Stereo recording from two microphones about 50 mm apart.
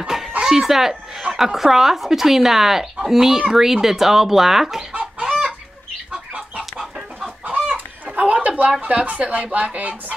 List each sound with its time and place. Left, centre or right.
0.0 s chicken: centre
0.4 s speech: centre
5.2 s chicken: centre
6.6 s chicken: centre
7.7 s chicken: right
8.8 s speech: right